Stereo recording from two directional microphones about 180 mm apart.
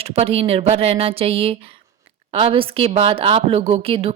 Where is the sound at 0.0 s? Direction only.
35° right (ahead or behind).